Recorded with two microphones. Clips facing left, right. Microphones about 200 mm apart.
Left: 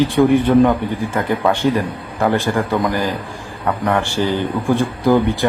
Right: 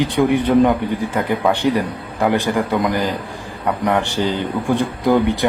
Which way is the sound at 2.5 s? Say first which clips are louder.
Even; 10° right (ahead or behind).